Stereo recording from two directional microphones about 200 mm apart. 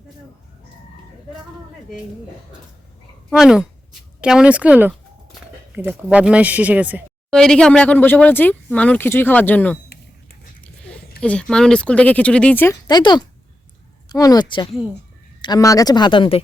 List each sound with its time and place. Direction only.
3.2 s speech: centre (ahead or behind)
7.3 s speech: 5° left (ahead or behind)
10.6 s a sound: 5° left (ahead or behind)
11.2 s speech: 5° left (ahead or behind)
12.9 s speech: 20° left (ahead or behind)